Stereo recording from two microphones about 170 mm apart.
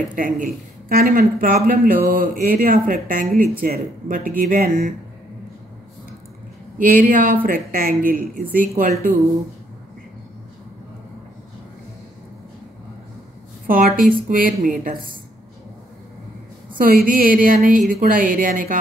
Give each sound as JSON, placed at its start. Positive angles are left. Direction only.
{"t": 0.1, "sound": "a woman's voice", "side_deg": -50}
{"t": 6.8, "sound": "speech", "side_deg": -50}
{"t": 13.7, "sound": "a woman's voice", "side_deg": -55}
{"t": 16.7, "sound": "a woman's voice", "side_deg": -55}